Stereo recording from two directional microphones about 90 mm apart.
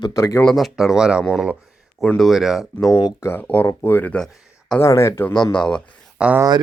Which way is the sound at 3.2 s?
20° left (ahead or behind).